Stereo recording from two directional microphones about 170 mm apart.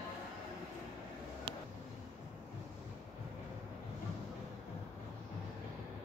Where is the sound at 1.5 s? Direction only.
30° right (ahead or behind).